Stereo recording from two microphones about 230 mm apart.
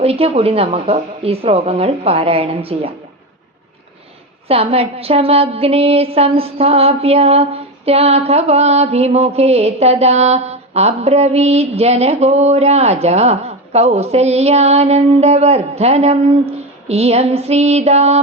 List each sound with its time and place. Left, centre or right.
0.0 s a woman's voice: right
4.4 s a woman's voice: right